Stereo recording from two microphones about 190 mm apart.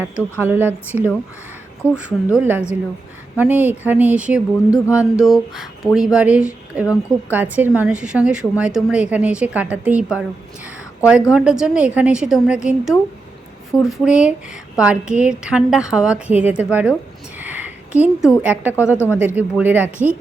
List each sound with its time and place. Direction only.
0.4 s speech: 10° right (ahead or behind)
17.4 s a sound: 10° right (ahead or behind)
18.4 s speech: 10° right (ahead or behind)
18.9 s speech: 15° left (ahead or behind)
19.1 s speech: 10° right (ahead or behind)